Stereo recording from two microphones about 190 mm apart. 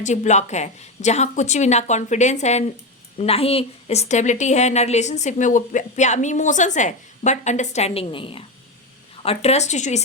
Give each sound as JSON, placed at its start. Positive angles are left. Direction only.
{"t": 0.0, "sound": "a woman's voice", "side_deg": 40}